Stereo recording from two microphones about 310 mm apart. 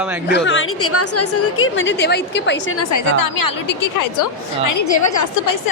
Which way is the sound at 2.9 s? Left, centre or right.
Left.